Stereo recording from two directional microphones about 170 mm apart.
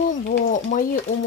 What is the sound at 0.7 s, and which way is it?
Speech, 45° left (ahead or behind).